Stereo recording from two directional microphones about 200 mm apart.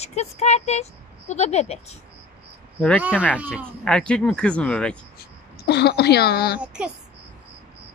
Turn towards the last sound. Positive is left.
turn(degrees=-5)  # may be behind; listen again after turning